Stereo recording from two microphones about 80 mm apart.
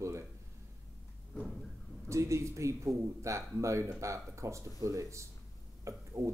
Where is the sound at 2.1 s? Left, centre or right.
Right.